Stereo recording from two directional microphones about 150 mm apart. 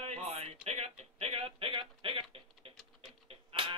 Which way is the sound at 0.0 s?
45° right (ahead or behind).